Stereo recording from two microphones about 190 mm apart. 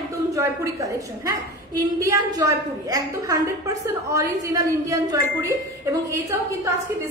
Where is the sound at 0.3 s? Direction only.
15° right (ahead or behind).